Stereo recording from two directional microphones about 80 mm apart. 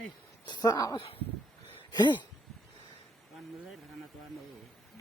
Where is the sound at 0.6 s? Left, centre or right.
Left.